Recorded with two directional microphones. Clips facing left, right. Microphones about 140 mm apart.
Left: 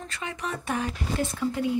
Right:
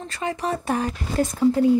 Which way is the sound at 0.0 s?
35° right (ahead or behind).